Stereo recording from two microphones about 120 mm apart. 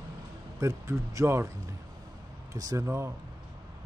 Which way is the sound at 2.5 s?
25° right (ahead or behind).